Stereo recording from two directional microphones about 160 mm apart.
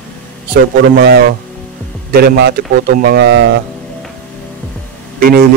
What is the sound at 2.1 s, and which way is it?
A man's voice, 75° right (ahead or behind).